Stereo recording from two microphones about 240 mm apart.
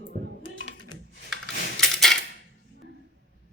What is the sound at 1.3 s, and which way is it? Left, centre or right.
Typewriter, right.